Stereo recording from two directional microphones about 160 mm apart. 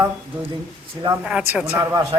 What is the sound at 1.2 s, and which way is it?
Speech, 5° right (ahead or behind).